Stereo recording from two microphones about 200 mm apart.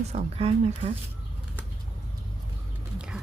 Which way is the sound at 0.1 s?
30° right (ahead or behind).